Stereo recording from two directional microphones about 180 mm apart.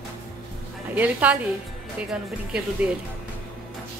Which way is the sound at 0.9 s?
10° right (ahead or behind).